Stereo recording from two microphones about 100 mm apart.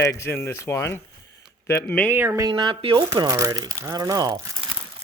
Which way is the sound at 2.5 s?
50° right (ahead or behind).